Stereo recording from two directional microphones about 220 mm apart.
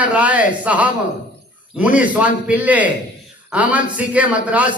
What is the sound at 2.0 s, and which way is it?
A man's voice, 5° right (ahead or behind).